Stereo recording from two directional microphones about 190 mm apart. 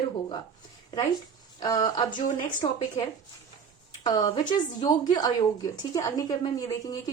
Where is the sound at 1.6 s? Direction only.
20° left (ahead or behind).